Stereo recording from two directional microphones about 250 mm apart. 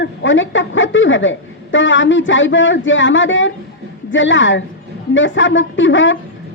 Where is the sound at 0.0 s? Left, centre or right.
Left.